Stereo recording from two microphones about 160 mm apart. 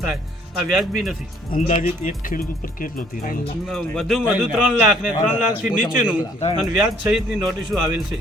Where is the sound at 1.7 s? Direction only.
45° left (ahead or behind).